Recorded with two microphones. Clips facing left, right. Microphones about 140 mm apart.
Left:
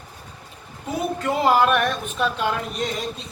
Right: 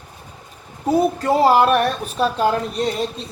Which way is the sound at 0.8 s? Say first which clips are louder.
Right 7 dB; 35° right (ahead or behind).